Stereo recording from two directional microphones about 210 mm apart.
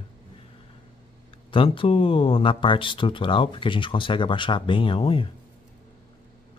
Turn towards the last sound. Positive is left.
turn(degrees=25)  # may be behind; listen again after turning